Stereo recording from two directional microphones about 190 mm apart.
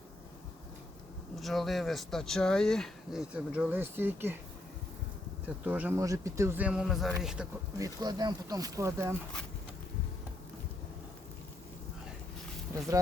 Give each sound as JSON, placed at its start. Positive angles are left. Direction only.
{"t": 1.4, "sound": "speech", "side_deg": 0}
{"t": 5.6, "sound": "speech", "side_deg": -10}
{"t": 7.8, "sound": "speech", "side_deg": -20}